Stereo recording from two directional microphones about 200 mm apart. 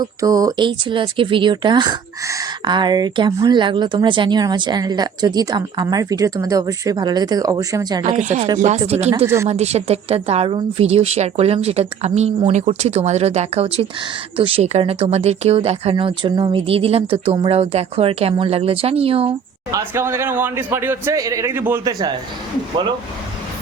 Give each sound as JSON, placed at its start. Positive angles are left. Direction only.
{"t": 0.0, "sound": "speech", "side_deg": -20}
{"t": 8.0, "sound": "a woman's voice", "side_deg": -35}
{"t": 19.7, "sound": "speech", "side_deg": -10}